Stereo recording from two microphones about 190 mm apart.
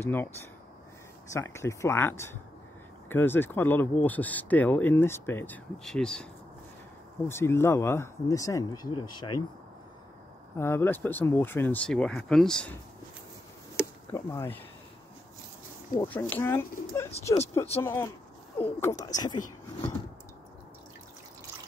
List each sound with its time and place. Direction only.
0.0 s speech: 10° left (ahead or behind)
7.2 s speech: 15° left (ahead or behind)
10.6 s speech: 10° left (ahead or behind)
14.1 s speech: 15° left (ahead or behind)
16.0 s speech: 10° left (ahead or behind)